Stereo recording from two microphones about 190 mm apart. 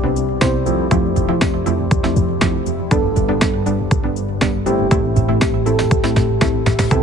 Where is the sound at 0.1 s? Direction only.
Centre (ahead or behind).